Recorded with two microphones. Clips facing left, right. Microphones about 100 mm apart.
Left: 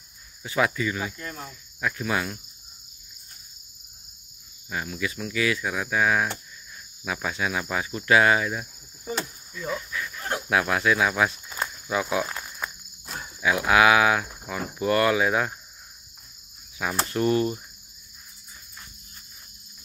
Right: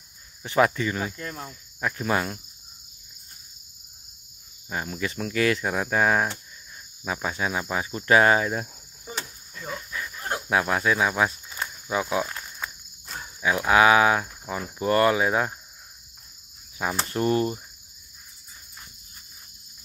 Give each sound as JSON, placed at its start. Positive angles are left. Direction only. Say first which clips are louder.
{"t": 0.4, "sound": "speech", "louder": "right 3 dB", "side_deg": -35}
{"t": 4.6, "sound": "speech", "louder": "even", "side_deg": -35}
{"t": 7.1, "sound": "cricket", "louder": "even", "side_deg": -30}
{"t": 7.7, "sound": "speech", "louder": "right 1 dB", "side_deg": -30}
{"t": 11.9, "sound": "cricket", "louder": "even", "side_deg": -25}
{"t": 13.7, "sound": "cricket", "louder": "right 1 dB", "side_deg": -30}
{"t": 16.7, "sound": "cricket", "louder": "even", "side_deg": -30}